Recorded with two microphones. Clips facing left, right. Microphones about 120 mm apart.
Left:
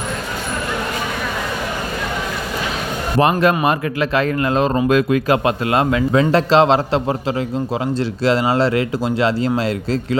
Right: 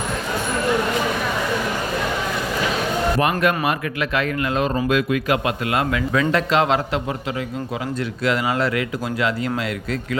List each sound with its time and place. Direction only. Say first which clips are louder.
3.2 s speech: left 9 dB; 30° left (ahead or behind)
8.2 s speech: left 5 dB; 30° left (ahead or behind)